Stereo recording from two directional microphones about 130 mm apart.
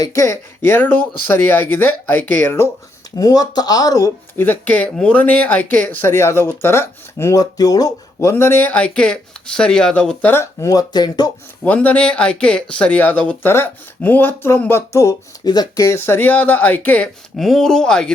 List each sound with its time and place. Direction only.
0.0 s speech: 20° left (ahead or behind)
3.2 s speech: 30° left (ahead or behind)
11.6 s speech: 10° left (ahead or behind)
17.3 s speech: centre (ahead or behind)